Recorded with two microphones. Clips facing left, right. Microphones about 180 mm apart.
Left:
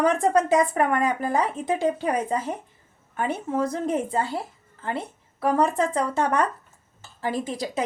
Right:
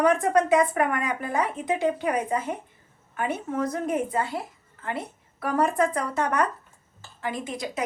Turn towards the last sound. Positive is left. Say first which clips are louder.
# left 4 dB
turn(degrees=35)  # may be behind; listen again after turning